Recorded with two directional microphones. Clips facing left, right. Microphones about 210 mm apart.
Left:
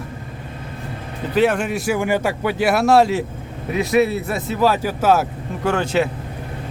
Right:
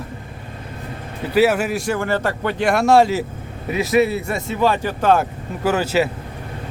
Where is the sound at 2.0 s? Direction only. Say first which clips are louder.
Left 1 dB; 10° left (ahead or behind).